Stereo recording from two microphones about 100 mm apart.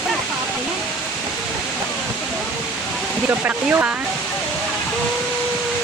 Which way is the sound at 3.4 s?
15° right (ahead or behind).